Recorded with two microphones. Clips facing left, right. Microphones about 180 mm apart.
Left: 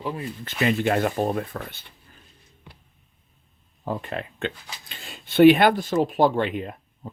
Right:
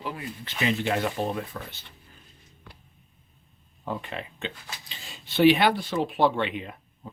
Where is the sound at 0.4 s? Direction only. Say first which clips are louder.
Left 4 dB; 50° left (ahead or behind).